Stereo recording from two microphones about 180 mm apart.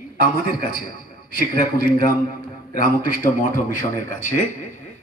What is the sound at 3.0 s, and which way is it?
Speech, 50° left (ahead or behind).